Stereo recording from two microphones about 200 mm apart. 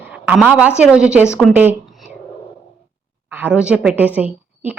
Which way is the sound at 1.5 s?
5° right (ahead or behind).